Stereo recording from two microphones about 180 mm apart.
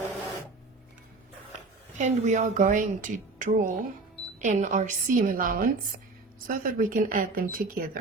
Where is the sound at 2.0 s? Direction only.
40° right (ahead or behind).